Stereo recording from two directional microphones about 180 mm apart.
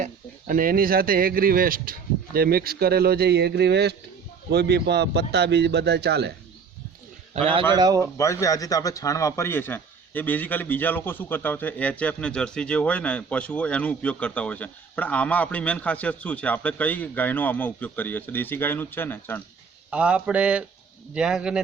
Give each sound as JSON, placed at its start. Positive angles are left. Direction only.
{"t": 0.0, "sound": "speech", "side_deg": -50}
{"t": 7.3, "sound": "a man's voice", "side_deg": -30}
{"t": 8.2, "sound": "speech", "side_deg": 15}
{"t": 19.9, "sound": "a man's voice", "side_deg": -5}